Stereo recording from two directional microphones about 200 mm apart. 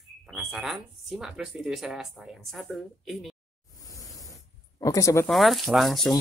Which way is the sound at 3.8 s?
15° left (ahead or behind).